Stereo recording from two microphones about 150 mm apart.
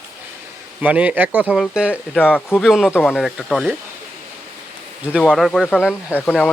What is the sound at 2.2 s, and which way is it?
Speech, 10° left (ahead or behind).